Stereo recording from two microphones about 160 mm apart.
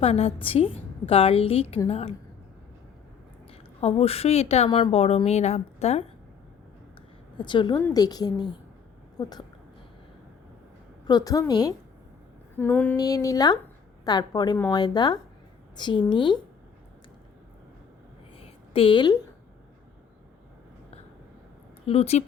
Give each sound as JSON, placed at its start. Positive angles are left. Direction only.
{"t": 0.0, "sound": "a woman's voice", "side_deg": 40}
{"t": 3.8, "sound": "a woman's voice", "side_deg": 40}
{"t": 7.3, "sound": "a woman's voice", "side_deg": 30}
{"t": 11.0, "sound": "a woman's voice", "side_deg": 25}
{"t": 12.5, "sound": "a sound", "side_deg": 10}
{"t": 13.0, "sound": "a woman's voice", "side_deg": 20}
{"t": 18.3, "sound": "a sound", "side_deg": 35}
{"t": 21.8, "sound": "a woman's voice", "side_deg": 40}